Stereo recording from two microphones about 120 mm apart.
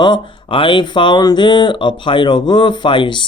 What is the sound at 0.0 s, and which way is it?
Speech, 40° left (ahead or behind).